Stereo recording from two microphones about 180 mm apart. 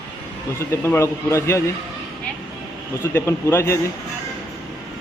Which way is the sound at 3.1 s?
15° left (ahead or behind).